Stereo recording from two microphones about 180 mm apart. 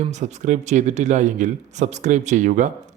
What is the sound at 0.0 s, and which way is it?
Speech, 40° right (ahead or behind).